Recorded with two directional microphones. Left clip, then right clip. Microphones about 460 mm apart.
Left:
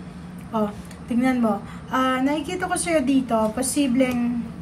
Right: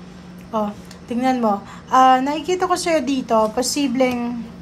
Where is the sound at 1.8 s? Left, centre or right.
Centre.